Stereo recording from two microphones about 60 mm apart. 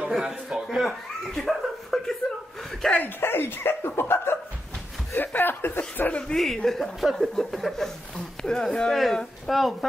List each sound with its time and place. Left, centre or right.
0.1 s a man's voice: centre
0.8 s chuckle: centre
3.0 s speech: left
6.2 s speech: centre